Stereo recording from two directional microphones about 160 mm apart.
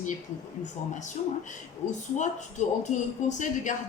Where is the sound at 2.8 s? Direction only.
50° left (ahead or behind).